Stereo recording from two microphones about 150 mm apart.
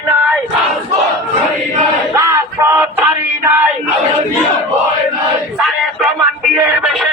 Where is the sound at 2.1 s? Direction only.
20° right (ahead or behind).